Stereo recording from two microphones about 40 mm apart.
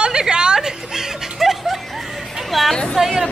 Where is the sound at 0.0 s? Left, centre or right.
Centre.